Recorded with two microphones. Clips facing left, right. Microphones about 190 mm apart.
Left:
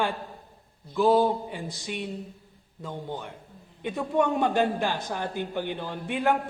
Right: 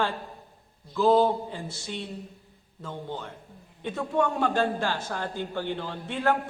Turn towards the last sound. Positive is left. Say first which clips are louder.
# left 1 dB
turn(degrees=15)  # may be behind; listen again after turning